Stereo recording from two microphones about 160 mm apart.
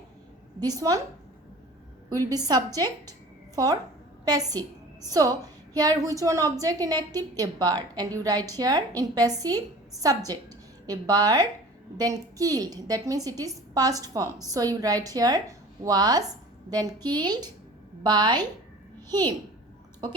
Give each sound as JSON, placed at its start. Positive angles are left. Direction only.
{"t": 0.6, "sound": "a woman's voice", "side_deg": -25}
{"t": 2.0, "sound": "a woman's voice", "side_deg": -25}